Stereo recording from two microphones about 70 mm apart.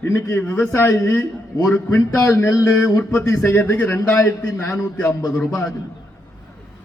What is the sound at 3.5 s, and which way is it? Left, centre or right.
Speech, left.